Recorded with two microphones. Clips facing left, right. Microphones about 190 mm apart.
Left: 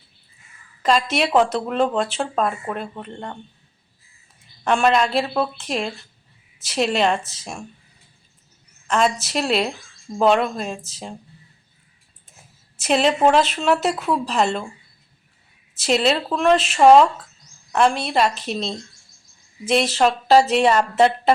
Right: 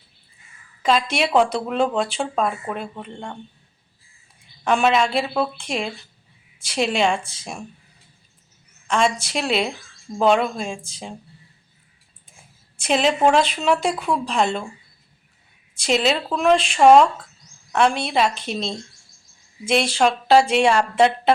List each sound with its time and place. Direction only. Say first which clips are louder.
0.8 s a woman's voice: left 1 dB; centre (ahead or behind)
4.6 s speech: even; 5° right (ahead or behind)
8.9 s speech: left 1 dB; 5° left (ahead or behind)
12.3 s speech: even; 5° left (ahead or behind)
15.7 s speech: left 1 dB; centre (ahead or behind)